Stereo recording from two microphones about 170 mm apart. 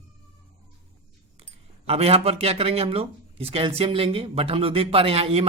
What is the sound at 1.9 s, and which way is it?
Speech, 35° right (ahead or behind).